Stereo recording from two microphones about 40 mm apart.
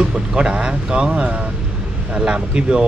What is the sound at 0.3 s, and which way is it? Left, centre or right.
Speech, right.